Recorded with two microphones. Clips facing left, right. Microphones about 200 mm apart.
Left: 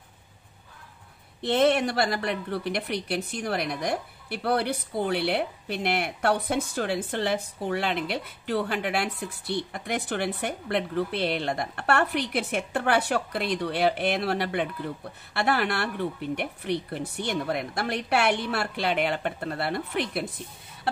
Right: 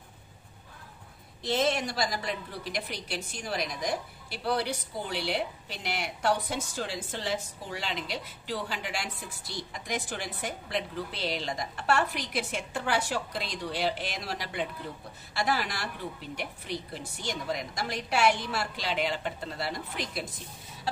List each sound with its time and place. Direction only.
1.4 s a woman's voice: 60° left (ahead or behind)